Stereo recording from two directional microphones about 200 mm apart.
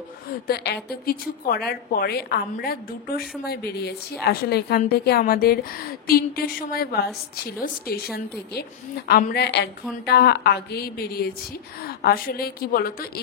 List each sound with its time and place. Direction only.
0.8 s a woman's voice: 50° left (ahead or behind)